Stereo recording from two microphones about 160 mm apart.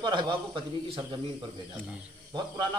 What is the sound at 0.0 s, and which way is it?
Speech, 30° right (ahead or behind).